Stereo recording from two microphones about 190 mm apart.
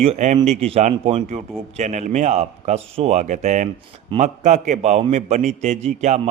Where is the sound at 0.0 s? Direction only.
35° right (ahead or behind).